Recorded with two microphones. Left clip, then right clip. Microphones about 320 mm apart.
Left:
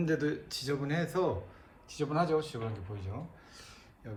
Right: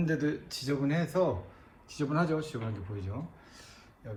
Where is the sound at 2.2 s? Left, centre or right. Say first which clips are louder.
Left 2 dB; left.